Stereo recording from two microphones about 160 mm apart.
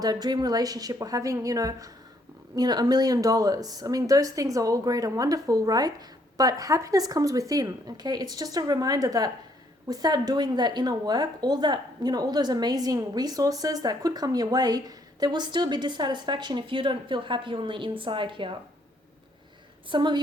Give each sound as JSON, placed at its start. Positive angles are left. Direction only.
{"t": 0.0, "sound": "a woman's voice", "side_deg": -25}
{"t": 19.9, "sound": "speech", "side_deg": -30}